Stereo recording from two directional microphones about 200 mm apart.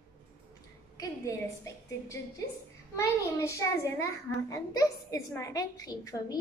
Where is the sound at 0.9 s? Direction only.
15° left (ahead or behind).